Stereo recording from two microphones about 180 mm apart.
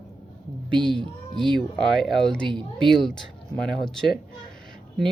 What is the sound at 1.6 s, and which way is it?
Speech, centre (ahead or behind).